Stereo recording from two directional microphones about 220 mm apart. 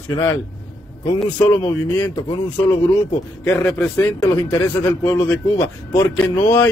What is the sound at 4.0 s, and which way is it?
Speech, 15° left (ahead or behind).